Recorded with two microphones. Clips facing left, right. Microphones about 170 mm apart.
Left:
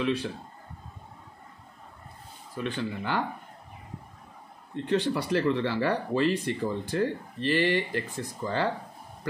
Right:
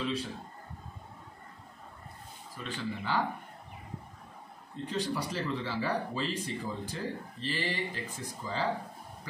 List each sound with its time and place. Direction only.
0.0 s a man's voice: 70° left (ahead or behind)
2.5 s speech: 60° left (ahead or behind)
4.8 s speech: 65° left (ahead or behind)